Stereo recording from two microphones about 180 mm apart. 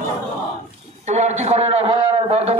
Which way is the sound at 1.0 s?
40° right (ahead or behind).